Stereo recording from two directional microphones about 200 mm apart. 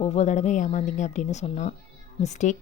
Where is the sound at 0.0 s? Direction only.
30° left (ahead or behind).